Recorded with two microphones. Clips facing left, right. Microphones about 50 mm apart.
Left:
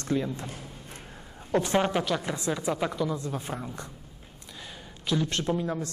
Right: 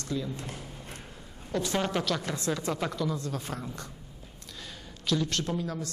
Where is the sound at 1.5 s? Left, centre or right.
Left.